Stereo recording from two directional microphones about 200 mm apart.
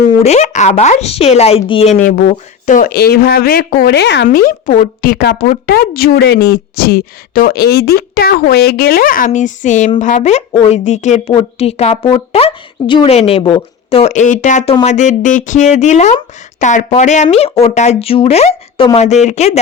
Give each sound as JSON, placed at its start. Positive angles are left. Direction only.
{"t": 0.2, "sound": "speech", "side_deg": 35}
{"t": 2.0, "sound": "speech", "side_deg": 40}